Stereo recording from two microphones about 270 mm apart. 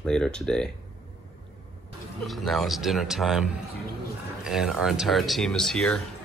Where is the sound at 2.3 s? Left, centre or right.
Centre.